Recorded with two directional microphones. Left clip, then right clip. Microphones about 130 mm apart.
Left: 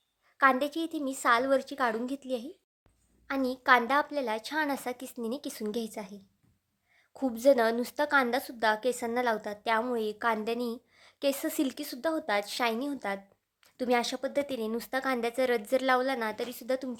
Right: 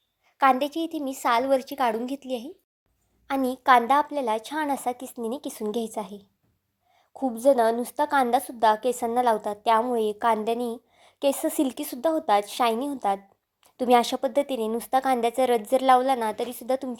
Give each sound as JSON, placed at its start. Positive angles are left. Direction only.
{"t": 0.5, "sound": "a woman's voice", "side_deg": -5}
{"t": 3.2, "sound": "a woman's voice", "side_deg": -20}
{"t": 7.1, "sound": "a woman's voice", "side_deg": 0}
{"t": 13.8, "sound": "a woman's voice", "side_deg": -30}